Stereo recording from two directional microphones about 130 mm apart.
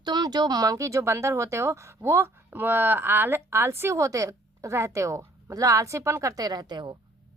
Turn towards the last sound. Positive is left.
turn(degrees=-35)  # may be behind; listen again after turning